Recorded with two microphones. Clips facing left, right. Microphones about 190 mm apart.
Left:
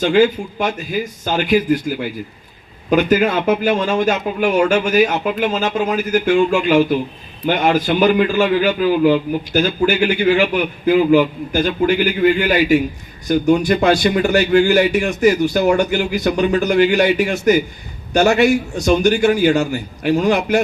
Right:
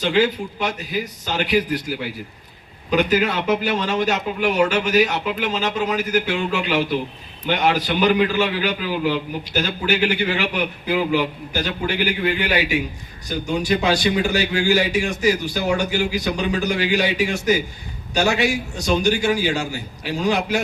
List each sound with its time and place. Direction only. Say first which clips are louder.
0.0 s a man's voice: left 5 dB; 50° left (ahead or behind)